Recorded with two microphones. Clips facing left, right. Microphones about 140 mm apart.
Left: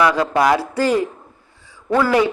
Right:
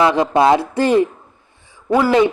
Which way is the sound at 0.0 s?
25° right (ahead or behind).